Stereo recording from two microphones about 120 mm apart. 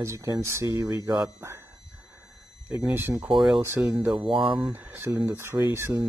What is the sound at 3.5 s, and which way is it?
Speech, 20° right (ahead or behind).